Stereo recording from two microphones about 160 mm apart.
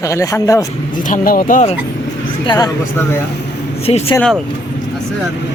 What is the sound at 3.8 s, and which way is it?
Speech, 40° left (ahead or behind).